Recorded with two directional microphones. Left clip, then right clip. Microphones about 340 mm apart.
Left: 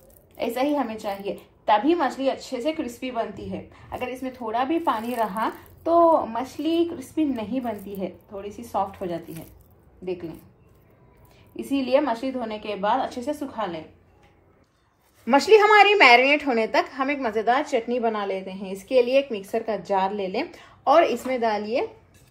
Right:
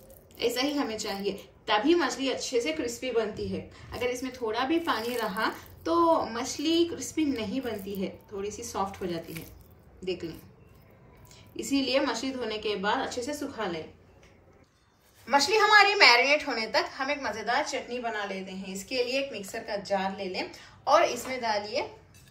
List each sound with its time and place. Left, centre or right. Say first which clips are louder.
0.4 s speech: left 4 dB; centre
11.5 s speech: left 5 dB; centre
15.2 s a woman's voice: left 7 dB; centre